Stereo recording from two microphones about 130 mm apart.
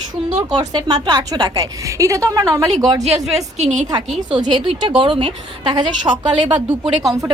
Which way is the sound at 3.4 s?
60° right (ahead or behind).